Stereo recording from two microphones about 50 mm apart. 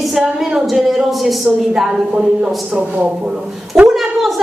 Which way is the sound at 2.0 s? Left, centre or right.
Right.